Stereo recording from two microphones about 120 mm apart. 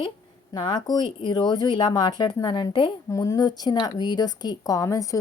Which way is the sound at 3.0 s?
30° left (ahead or behind).